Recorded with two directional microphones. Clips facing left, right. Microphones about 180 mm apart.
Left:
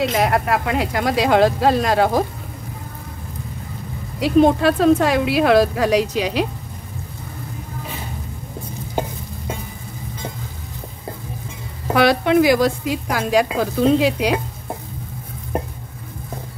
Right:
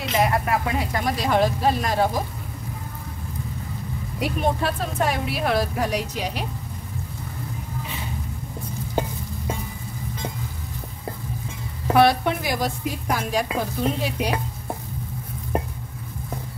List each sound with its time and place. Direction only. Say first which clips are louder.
0.2 s a woman's voice: left 3 dB; 80° left
4.2 s a woman's voice: left 10 dB; 90° left
11.9 s a woman's voice: left 3 dB; 90° left